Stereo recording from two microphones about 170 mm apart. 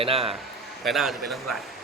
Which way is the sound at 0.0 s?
35° right (ahead or behind).